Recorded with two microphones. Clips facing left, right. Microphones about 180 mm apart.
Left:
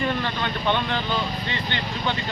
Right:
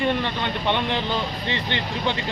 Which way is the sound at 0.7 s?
25° right (ahead or behind).